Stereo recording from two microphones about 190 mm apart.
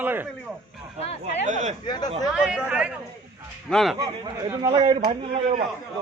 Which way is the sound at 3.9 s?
20° right (ahead or behind).